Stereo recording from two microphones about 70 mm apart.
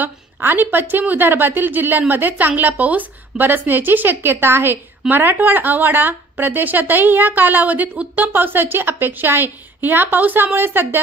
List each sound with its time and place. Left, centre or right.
0.0 s a woman's voice: right